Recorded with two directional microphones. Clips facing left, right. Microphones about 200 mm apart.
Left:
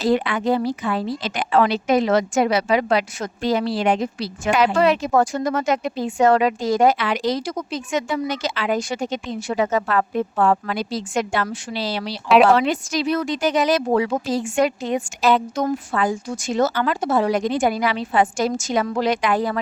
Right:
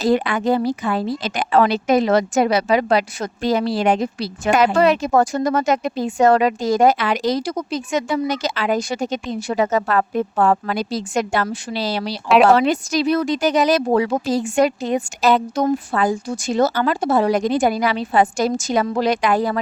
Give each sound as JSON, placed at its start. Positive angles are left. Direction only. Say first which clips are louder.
{"t": 0.0, "sound": "a woman's voice", "louder": "right 2 dB", "side_deg": -45}